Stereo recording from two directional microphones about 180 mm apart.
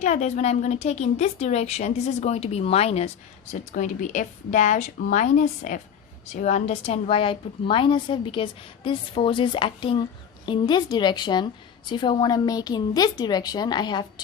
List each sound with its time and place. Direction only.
0.0 s a woman's voice: 40° left (ahead or behind); by 14.0 s 25° left (ahead or behind)